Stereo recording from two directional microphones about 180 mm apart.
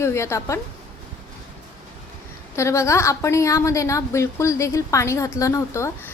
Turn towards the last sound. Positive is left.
turn(degrees=15)  # may be behind; listen again after turning